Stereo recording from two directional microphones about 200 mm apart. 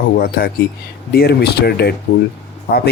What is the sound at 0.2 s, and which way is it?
Speech, 50° left (ahead or behind).